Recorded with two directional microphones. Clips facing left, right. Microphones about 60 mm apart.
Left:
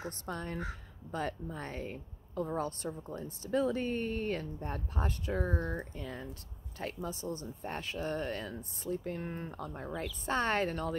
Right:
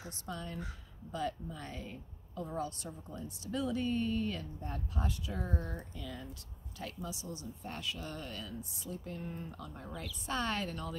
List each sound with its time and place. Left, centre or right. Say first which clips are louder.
0.0 s speech: left 4 dB; left